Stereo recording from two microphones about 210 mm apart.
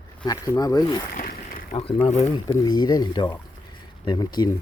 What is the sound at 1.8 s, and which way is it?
Speech, 30° left (ahead or behind).